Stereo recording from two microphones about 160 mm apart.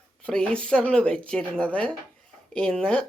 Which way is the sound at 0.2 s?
5° left (ahead or behind).